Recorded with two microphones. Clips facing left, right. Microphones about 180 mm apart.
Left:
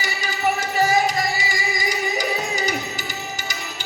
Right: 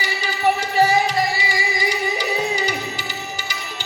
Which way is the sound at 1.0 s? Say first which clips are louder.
Right 2 dB; 45° left (ahead or behind).